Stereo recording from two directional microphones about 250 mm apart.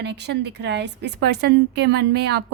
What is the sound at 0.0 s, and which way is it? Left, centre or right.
A woman's voice, right.